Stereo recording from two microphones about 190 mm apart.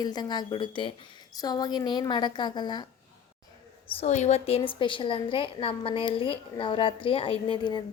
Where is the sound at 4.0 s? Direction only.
35° left (ahead or behind).